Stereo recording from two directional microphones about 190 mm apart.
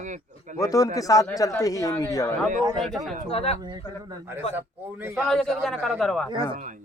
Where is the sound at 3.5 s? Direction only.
20° right (ahead or behind).